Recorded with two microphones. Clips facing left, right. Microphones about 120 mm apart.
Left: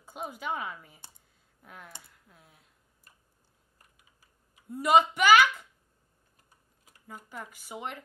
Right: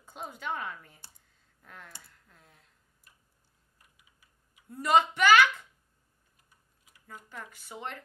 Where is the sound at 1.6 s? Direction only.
10° left (ahead or behind).